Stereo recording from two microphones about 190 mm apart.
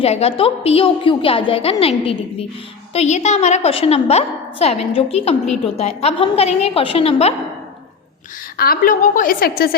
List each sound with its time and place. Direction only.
0.0 s a woman's voice: 30° left (ahead or behind)
8.5 s a woman's voice: 50° left (ahead or behind)